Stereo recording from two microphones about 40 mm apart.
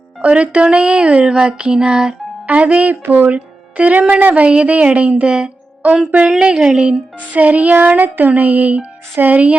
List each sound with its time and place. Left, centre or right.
0.2 s speech: right
2.5 s child singing: right
3.1 s speech: right
4.2 s speech: right
4.4 s child singing: right
6.4 s a woman's voice: centre
7.3 s child singing: right
9.1 s speech: right